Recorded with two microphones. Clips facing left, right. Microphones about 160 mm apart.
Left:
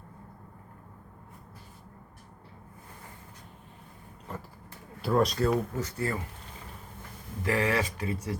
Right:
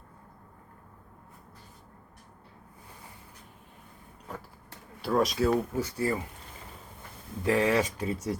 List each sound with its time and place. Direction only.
5.0 s speech: centre (ahead or behind)
7.4 s speech: 15° right (ahead or behind)